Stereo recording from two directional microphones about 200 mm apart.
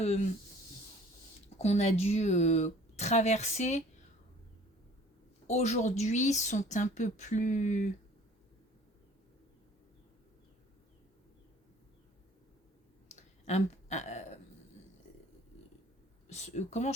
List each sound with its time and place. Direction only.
0.0 s a woman's voice: 35° left (ahead or behind)
1.5 s a woman's voice: 35° left (ahead or behind)
5.5 s a woman's voice: 35° left (ahead or behind)
13.1 s clicking: 35° left (ahead or behind)
16.3 s a woman's voice: 35° left (ahead or behind)